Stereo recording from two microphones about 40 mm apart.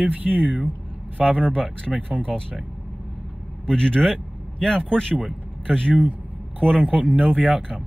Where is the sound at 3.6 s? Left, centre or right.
Left.